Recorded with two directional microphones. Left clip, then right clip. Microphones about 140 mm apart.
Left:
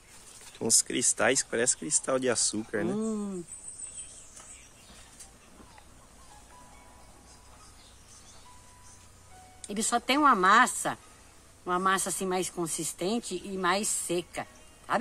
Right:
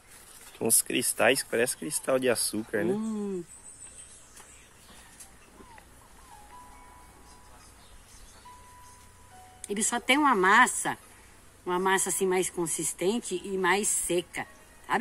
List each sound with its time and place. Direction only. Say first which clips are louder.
0.6 s speech: even; 5° right (ahead or behind)
9.7 s speech: right 2 dB; 20° left (ahead or behind)